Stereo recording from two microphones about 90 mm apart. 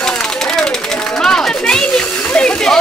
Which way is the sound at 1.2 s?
10° left (ahead or behind).